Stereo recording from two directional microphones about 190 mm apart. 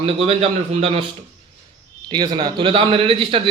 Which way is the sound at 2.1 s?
25° right (ahead or behind).